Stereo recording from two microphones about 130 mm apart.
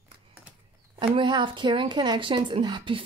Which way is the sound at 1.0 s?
35° right (ahead or behind).